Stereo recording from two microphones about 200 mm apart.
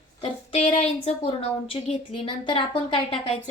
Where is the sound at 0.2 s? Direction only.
30° left (ahead or behind).